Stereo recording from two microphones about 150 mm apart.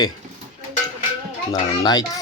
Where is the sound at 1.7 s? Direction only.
25° left (ahead or behind).